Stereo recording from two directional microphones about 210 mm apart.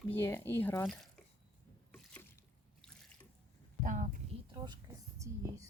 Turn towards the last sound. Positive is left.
turn(degrees=-15)  # may be behind; listen again after turning